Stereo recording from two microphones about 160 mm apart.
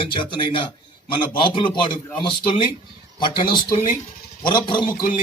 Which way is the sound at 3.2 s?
30° left (ahead or behind).